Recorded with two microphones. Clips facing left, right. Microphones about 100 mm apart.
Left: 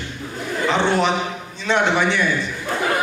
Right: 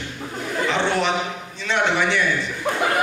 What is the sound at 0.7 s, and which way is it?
A man's voice, 20° left (ahead or behind).